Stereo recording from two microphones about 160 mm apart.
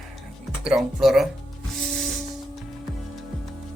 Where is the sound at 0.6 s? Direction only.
5° right (ahead or behind).